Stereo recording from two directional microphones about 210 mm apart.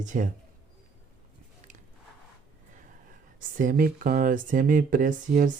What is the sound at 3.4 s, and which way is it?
Speech, 40° right (ahead or behind).